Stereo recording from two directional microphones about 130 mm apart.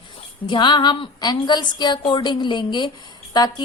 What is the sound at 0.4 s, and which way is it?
Speech, 35° left (ahead or behind).